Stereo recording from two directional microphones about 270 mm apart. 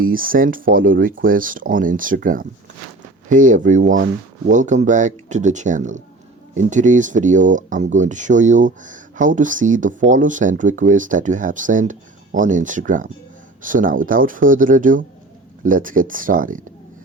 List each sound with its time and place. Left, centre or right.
0.0 s speech: right